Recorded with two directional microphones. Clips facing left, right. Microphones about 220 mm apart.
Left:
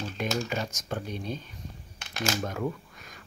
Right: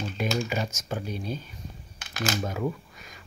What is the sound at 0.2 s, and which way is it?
Typing, 5° right (ahead or behind).